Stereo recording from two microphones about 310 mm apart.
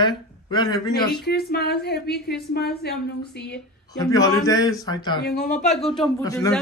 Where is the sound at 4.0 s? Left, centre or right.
Centre.